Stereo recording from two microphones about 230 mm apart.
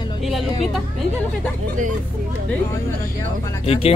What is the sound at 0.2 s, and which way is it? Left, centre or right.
Speech, centre.